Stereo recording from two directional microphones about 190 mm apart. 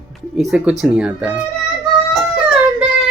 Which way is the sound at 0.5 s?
5° right (ahead or behind).